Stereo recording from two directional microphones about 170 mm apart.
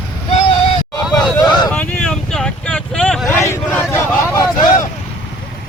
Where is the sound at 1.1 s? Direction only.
25° left (ahead or behind).